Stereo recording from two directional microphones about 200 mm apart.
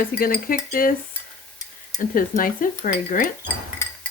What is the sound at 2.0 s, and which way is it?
A woman's voice, 45° left (ahead or behind).